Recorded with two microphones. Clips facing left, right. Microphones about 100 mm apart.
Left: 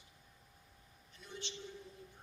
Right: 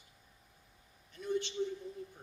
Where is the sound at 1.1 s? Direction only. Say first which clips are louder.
Right 14 dB; 50° right (ahead or behind).